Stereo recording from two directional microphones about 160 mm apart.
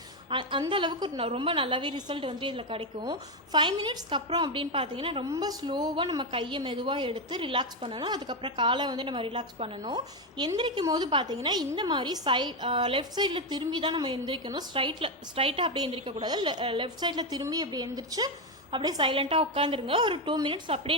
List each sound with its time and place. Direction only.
0.3 s a woman's voice: 30° right (ahead or behind)
5.3 s a woman's voice: 25° right (ahead or behind)